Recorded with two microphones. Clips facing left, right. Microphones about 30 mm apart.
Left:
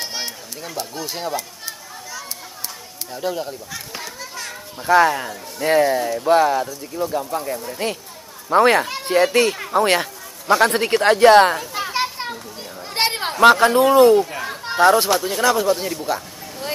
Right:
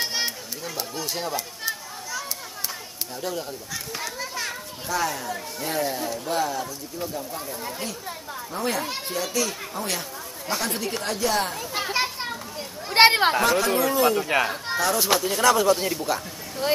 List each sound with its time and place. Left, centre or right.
0.0 s a sound: centre
0.7 s speech: centre
1.6 s children playing: centre
3.2 s speech: centre
4.2 s children playing: centre
4.8 s speech: left
7.8 s speech: left
11.8 s children playing: centre
12.9 s speech: centre
13.4 s speech: left
14.3 s speech: right
14.8 s speech: left
15.1 s speech: centre
15.6 s speech: centre